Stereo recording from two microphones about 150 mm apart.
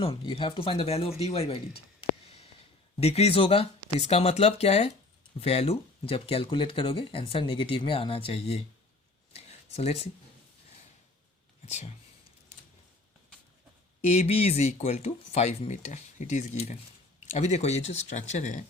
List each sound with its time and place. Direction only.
0.0 s speech: 35° left (ahead or behind)
3.0 s speech: 45° left (ahead or behind)
9.3 s a sound: 45° left (ahead or behind)
14.1 s speech: 45° left (ahead or behind)